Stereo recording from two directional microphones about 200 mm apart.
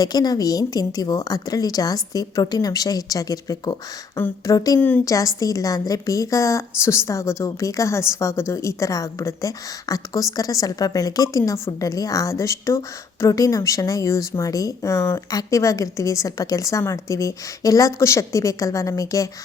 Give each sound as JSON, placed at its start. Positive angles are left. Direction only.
{"t": 0.0, "sound": "a woman's voice", "side_deg": 20}